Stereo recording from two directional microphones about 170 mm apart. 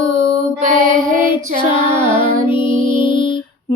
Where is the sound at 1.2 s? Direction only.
30° left (ahead or behind).